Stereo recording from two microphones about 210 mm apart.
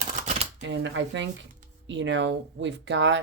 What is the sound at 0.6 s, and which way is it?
Speech, 60° right (ahead or behind).